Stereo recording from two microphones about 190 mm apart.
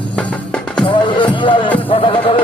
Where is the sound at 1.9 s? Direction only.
30° left (ahead or behind).